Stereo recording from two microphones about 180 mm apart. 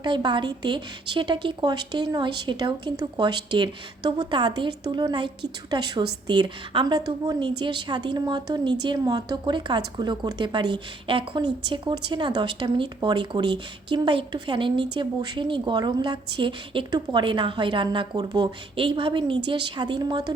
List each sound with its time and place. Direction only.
0.0 s a woman's voice: 25° right (ahead or behind)